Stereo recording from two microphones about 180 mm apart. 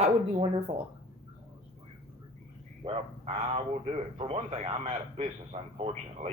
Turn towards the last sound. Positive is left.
turn(degrees=-35)  # may be behind; listen again after turning